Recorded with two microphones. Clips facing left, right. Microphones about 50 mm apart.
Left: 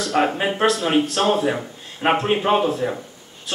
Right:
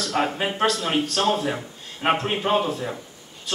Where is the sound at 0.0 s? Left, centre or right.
Centre.